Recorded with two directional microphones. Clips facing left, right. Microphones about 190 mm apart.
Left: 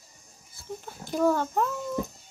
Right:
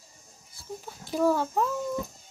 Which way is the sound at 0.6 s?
Centre (ahead or behind).